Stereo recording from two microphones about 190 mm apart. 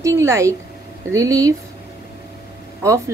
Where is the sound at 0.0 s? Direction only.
15° right (ahead or behind).